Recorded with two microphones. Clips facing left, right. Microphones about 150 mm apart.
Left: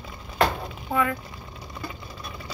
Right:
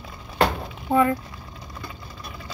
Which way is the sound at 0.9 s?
30° right (ahead or behind).